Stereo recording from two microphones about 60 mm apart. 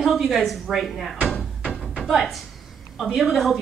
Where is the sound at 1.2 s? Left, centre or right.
Centre.